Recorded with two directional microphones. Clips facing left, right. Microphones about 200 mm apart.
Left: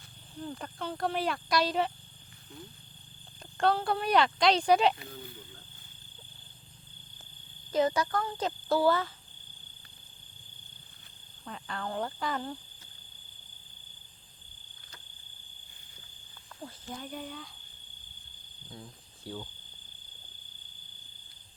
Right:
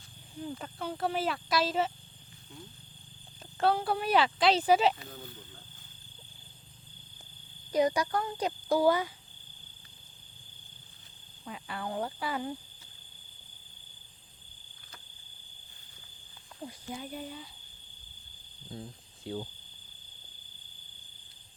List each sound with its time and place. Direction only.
0.3 s speech: 5° right (ahead or behind)
3.6 s speech: 5° right (ahead or behind)
7.7 s a child's voice: 15° right (ahead or behind)
11.4 s a child's voice: 5° right (ahead or behind)
16.6 s speech: 10° right (ahead or behind)
18.7 s speech: 25° right (ahead or behind)